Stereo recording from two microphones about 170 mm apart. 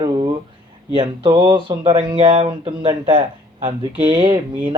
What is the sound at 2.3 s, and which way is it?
Speech, 35° right (ahead or behind).